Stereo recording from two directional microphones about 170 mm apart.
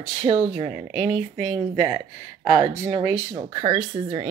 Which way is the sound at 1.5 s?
30° right (ahead or behind).